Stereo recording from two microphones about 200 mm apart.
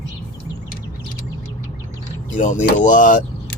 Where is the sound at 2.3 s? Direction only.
40° left (ahead or behind).